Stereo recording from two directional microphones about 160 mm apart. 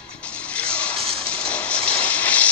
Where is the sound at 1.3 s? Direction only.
5° left (ahead or behind).